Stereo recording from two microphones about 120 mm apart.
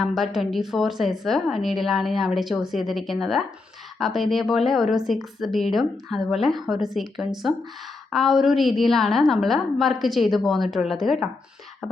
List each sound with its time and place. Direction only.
0.0 s a woman's voice: centre (ahead or behind)